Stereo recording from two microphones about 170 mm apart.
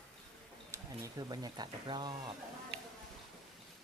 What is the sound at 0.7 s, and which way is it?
Speech, 20° right (ahead or behind).